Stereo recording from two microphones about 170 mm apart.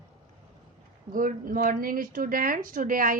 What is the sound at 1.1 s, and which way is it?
Speech, 50° right (ahead or behind).